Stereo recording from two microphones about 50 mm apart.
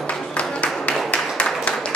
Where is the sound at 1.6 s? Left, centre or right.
Centre.